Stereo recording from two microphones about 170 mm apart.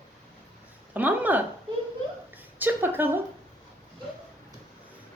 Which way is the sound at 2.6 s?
10° right (ahead or behind).